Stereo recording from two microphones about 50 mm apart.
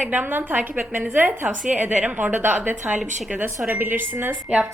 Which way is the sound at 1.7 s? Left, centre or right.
Right.